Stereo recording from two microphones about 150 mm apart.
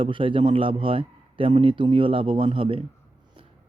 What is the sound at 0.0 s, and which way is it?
Speech, 35° right (ahead or behind).